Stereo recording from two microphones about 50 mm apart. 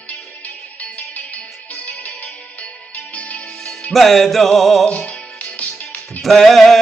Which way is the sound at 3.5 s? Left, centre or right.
Centre.